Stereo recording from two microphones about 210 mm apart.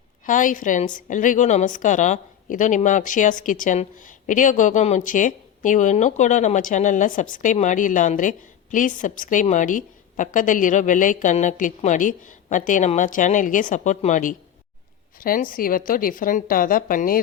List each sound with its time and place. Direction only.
0.3 s a woman's voice: 40° left (ahead or behind)